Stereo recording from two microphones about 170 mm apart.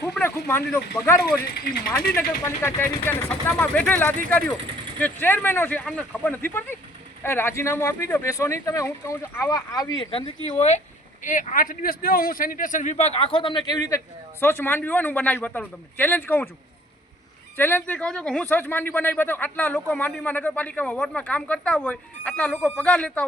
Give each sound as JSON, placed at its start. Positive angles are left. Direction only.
{"t": 0.0, "sound": "speech", "side_deg": 15}
{"t": 1.4, "sound": "speech", "side_deg": 65}
{"t": 2.1, "sound": "speech", "side_deg": 15}
{"t": 11.2, "sound": "a man's voice", "side_deg": 50}
{"t": 17.6, "sound": "speech", "side_deg": 10}